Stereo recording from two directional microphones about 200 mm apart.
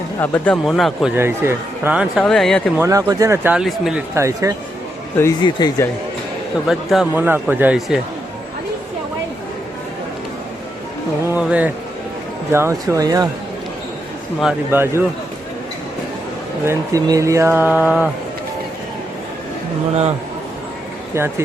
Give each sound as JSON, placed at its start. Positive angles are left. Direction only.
{"t": 0.2, "sound": "speech", "side_deg": 10}
{"t": 1.1, "sound": "speech", "side_deg": -10}
{"t": 2.7, "sound": "speech", "side_deg": -10}
{"t": 4.1, "sound": "speech", "side_deg": -15}
{"t": 5.1, "sound": "speech", "side_deg": 15}
{"t": 6.7, "sound": "speech", "side_deg": 0}
{"t": 11.3, "sound": "speech", "side_deg": -5}
{"t": 14.4, "sound": "speech", "side_deg": -10}
{"t": 16.6, "sound": "speech", "side_deg": -15}